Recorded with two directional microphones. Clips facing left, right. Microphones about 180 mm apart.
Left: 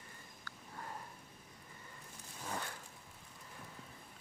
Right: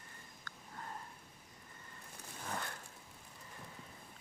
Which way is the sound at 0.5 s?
10° left (ahead or behind).